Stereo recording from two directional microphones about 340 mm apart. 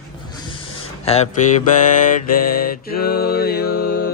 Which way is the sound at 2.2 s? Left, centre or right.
Left.